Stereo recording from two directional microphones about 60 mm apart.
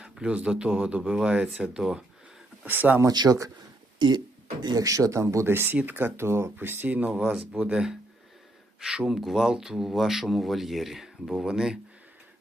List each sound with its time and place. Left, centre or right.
0.0 s speech: centre
2.6 s speech: right
3.0 s speech: right
4.7 s speech: right
5.5 s speech: right
6.1 s speech: right
6.8 s speech: right